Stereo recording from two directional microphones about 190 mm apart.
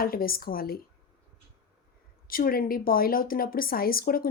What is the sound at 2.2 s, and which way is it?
Speech, 50° left (ahead or behind).